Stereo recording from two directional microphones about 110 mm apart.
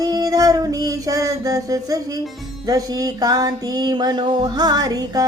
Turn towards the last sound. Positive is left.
turn(degrees=-35)  # may be behind; listen again after turning